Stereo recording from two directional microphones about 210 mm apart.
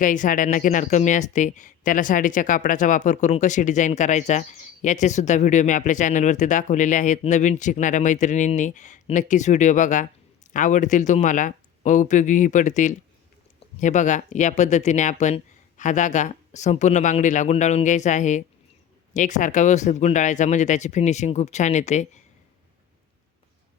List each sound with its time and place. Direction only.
0.0 s speech: 40° left (ahead or behind)